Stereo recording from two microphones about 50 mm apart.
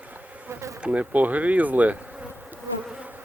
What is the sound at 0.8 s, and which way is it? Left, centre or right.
Speech, right.